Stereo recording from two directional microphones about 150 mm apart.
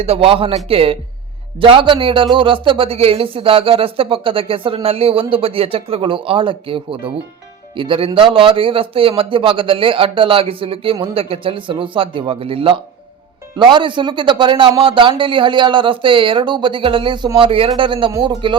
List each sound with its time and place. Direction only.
0.0 s a man's voice: 40° right (ahead or behind)